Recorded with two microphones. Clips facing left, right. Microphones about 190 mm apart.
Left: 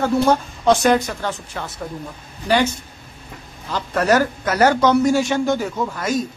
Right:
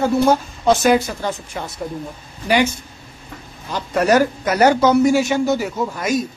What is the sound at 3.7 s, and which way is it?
Speech, 15° right (ahead or behind).